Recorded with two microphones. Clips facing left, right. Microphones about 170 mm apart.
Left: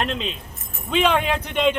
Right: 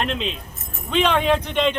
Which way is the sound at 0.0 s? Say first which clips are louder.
Right 1 dB; centre (ahead or behind).